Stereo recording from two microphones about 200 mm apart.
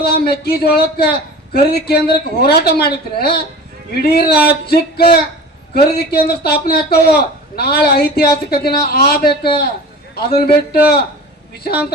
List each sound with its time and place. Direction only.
0.0 s a man's voice: 55° left (ahead or behind)